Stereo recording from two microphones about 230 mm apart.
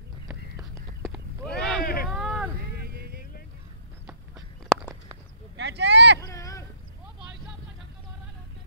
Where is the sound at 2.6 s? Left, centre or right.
Right.